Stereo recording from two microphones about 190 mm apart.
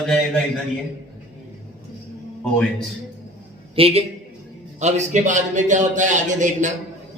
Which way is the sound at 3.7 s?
30° right (ahead or behind).